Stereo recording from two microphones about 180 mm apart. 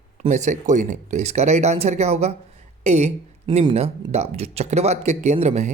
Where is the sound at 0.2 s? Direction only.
40° right (ahead or behind).